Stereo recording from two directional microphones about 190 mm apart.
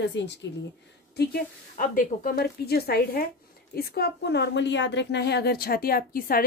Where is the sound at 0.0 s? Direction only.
65° left (ahead or behind).